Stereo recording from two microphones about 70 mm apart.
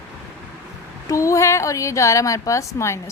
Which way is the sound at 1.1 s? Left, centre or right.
Left.